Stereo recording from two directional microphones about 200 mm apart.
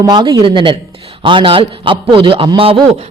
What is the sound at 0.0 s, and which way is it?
A man's voice, 20° right (ahead or behind).